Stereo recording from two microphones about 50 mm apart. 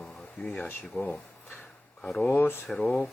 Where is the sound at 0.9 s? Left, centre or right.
Left.